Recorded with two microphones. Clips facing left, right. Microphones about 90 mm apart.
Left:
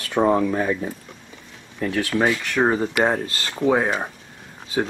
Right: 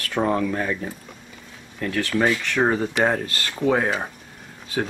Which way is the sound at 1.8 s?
20° left (ahead or behind).